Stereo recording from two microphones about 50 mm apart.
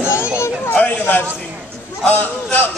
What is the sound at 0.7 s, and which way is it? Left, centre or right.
A man's voice, left.